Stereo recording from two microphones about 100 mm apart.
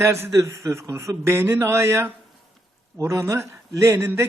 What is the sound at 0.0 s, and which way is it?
Speech, 25° right (ahead or behind).